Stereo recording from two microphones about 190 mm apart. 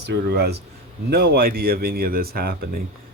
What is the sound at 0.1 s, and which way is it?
Speech, 60° right (ahead or behind).